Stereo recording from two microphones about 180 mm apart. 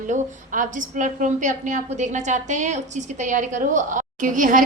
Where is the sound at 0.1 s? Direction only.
45° right (ahead or behind).